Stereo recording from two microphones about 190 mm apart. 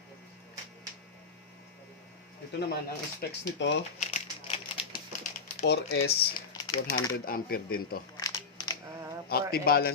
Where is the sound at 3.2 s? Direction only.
70° left (ahead or behind).